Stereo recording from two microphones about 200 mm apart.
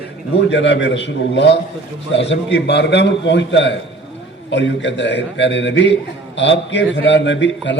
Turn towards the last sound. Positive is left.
turn(degrees=65)  # may be behind; listen again after turning